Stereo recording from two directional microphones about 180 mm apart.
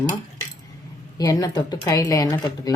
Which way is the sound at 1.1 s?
20° left (ahead or behind).